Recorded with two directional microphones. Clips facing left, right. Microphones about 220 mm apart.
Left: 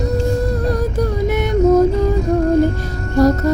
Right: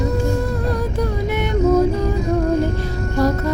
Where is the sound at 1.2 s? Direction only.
40° left (ahead or behind).